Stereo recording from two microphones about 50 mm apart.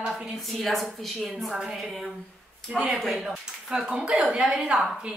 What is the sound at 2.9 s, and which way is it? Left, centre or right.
A woman's voice, centre.